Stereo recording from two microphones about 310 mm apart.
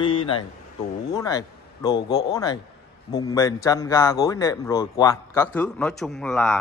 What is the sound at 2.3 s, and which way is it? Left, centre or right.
Mantra, centre.